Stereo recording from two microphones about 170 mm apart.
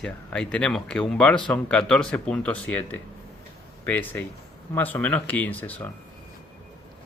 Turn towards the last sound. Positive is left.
turn(degrees=10)  # may be behind; listen again after turning